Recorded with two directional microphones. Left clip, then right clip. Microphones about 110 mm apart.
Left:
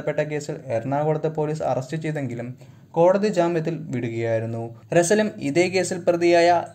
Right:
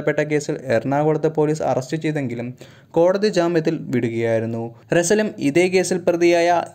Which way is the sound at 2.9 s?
55° right (ahead or behind).